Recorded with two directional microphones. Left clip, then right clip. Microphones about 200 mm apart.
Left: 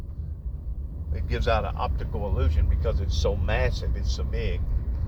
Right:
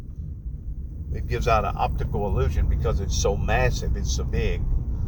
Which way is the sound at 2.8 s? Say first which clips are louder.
Right 3 dB; 15° right (ahead or behind).